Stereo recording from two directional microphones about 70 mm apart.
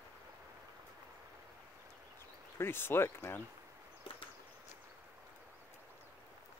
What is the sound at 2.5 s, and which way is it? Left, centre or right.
Speech, left.